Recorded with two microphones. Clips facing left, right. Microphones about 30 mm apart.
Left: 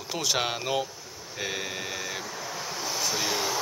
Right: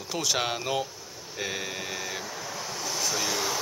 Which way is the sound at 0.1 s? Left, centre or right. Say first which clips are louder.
Even; centre.